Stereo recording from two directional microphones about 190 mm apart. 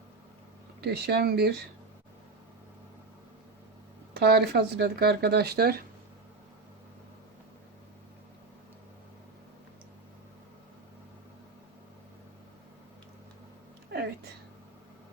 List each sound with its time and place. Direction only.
0.8 s speech: 55° right (ahead or behind)
4.1 s speech: 60° right (ahead or behind)